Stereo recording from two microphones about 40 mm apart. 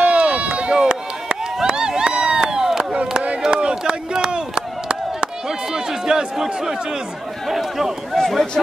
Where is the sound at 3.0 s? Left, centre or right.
Right.